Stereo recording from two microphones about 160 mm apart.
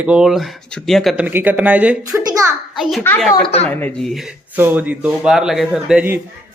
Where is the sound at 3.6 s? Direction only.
5° left (ahead or behind).